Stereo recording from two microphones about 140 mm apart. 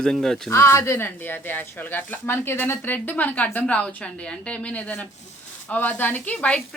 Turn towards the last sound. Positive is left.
turn(degrees=10)  # may be behind; listen again after turning